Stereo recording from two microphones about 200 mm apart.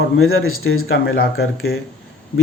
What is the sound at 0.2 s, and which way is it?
Speech, 90° left.